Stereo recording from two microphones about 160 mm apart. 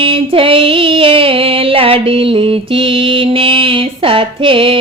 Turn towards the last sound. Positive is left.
turn(degrees=-35)  # may be behind; listen again after turning